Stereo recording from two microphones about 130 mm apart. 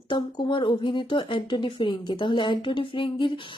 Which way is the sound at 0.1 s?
35° left (ahead or behind).